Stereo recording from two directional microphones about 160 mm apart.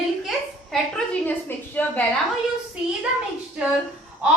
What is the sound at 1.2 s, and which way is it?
Speech, 10° left (ahead or behind).